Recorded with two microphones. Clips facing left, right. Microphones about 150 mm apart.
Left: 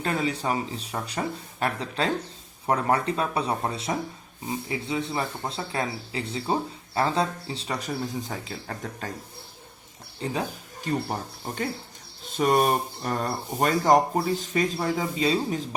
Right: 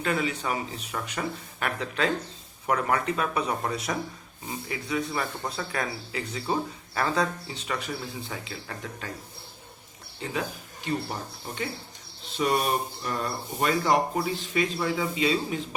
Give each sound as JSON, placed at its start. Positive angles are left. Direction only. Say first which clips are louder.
{"t": 0.0, "sound": "speech", "louder": "left 1 dB", "side_deg": 35}
{"t": 10.2, "sound": "speech", "louder": "left 2 dB", "side_deg": 40}